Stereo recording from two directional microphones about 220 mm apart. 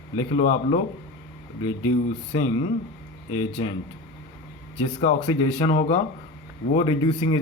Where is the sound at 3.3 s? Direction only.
20° left (ahead or behind).